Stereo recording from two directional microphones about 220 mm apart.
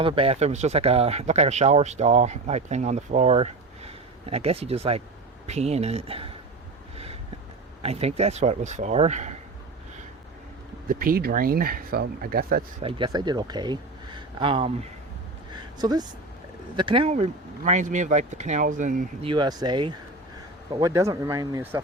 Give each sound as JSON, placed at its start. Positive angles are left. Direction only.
{"t": 0.0, "sound": "speech", "side_deg": -25}
{"t": 6.9, "sound": "a sound", "side_deg": -25}
{"t": 7.8, "sound": "speech", "side_deg": -25}
{"t": 10.8, "sound": "speech", "side_deg": -40}
{"t": 12.8, "sound": "speech", "side_deg": -25}
{"t": 15.8, "sound": "speech", "side_deg": -20}
{"t": 19.3, "sound": "speech", "side_deg": -20}